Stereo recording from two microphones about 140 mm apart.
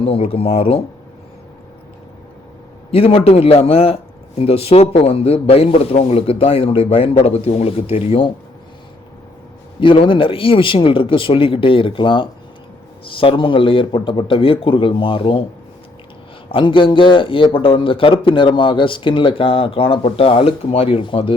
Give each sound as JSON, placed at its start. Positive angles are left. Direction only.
{"t": 0.0, "sound": "speech", "side_deg": 45}
{"t": 2.9, "sound": "speech", "side_deg": 45}
{"t": 9.8, "sound": "a man's voice", "side_deg": 40}
{"t": 16.5, "sound": "a man's voice", "side_deg": 40}